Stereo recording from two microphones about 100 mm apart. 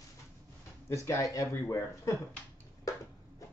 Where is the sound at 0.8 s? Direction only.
25° left (ahead or behind).